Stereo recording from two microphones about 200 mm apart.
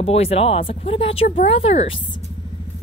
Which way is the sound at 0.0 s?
30° left (ahead or behind).